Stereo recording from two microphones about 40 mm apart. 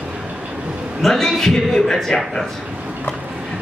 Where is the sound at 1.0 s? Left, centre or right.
Centre.